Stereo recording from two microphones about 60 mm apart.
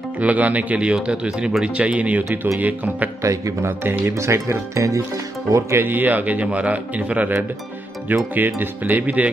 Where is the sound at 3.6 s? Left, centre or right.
Right.